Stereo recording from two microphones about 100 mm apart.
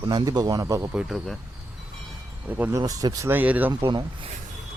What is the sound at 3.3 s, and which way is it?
Speech, 15° right (ahead or behind).